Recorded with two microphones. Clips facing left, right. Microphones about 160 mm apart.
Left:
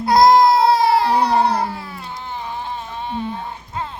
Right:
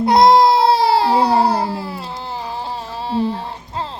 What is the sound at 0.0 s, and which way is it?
Baby cry, 25° right (ahead or behind).